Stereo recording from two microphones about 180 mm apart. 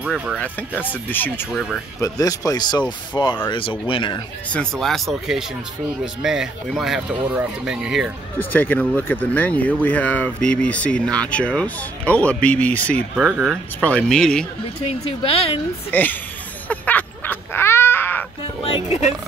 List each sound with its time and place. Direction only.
0.0 s speech: 5° right (ahead or behind)
0.4 s speech: 10° left (ahead or behind); by 4.2 s 25° left (ahead or behind)
4.5 s speech: 5° left (ahead or behind)
8.4 s speech: 10° left (ahead or behind)
14.9 s speech: 30° left (ahead or behind)
15.9 s speech: 10° left (ahead or behind)
16.6 s a sound: 10° left (ahead or behind)